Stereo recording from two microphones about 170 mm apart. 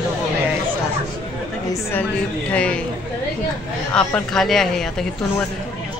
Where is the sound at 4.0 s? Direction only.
5° left (ahead or behind).